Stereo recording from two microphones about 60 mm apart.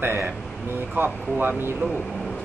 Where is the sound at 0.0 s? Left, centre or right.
Right.